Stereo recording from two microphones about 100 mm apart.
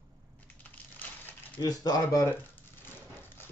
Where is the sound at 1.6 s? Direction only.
40° left (ahead or behind).